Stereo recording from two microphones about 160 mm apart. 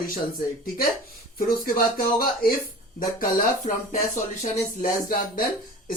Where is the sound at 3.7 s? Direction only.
50° left (ahead or behind).